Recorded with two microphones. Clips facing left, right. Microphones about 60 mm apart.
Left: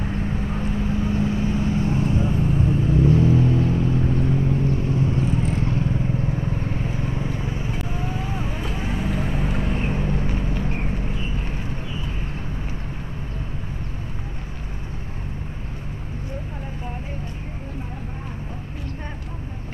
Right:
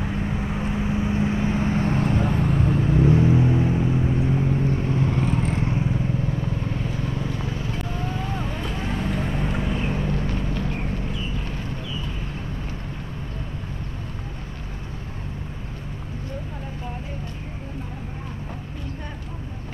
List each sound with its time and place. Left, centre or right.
0.0 s vehicle: centre
4.4 s vehicle: right
4.7 s vehicle: right
6.2 s vehicle: left; by 9.8 s centre
10.0 s vehicle: centre
11.1 s a sound: left